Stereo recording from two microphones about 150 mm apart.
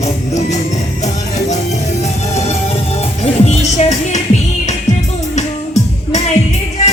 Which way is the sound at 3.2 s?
45° left (ahead or behind).